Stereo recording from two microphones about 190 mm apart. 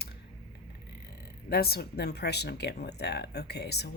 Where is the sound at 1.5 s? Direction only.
55° left (ahead or behind).